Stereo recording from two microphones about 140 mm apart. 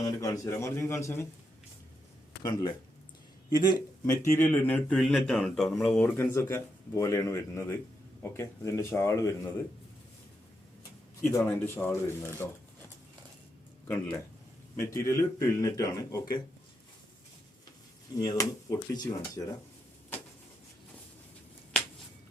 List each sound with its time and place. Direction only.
0.0 s a man's voice: 20° left (ahead or behind)
2.4 s a man's voice: 25° left (ahead or behind); by 6.1 s 5° left (ahead or behind)
6.1 s a man's voice: 20° left (ahead or behind)
11.3 s speech: 15° left (ahead or behind)
13.8 s a man's voice: 15° left (ahead or behind)
18.1 s a man's voice: 25° left (ahead or behind)